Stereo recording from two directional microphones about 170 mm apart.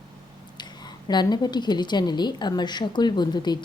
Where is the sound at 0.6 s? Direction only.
25° left (ahead or behind).